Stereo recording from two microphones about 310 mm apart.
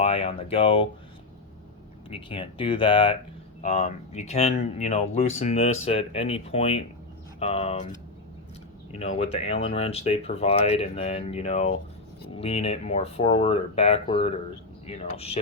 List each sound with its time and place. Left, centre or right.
0.0 s speech: centre
2.0 s speech: centre
9.0 s speech: centre